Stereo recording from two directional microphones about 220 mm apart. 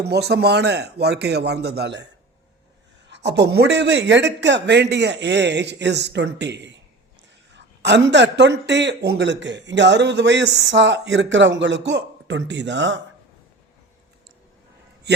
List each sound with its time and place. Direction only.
0.0 s speech: 50° right (ahead or behind)
3.1 s speech: 50° right (ahead or behind)